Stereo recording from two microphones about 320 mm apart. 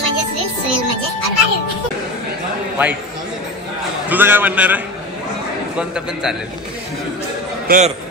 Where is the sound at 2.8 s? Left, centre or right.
Centre.